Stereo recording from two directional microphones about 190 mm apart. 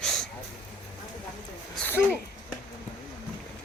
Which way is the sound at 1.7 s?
10° left (ahead or behind).